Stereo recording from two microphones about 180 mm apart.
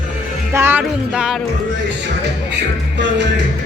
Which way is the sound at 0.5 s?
10° right (ahead or behind).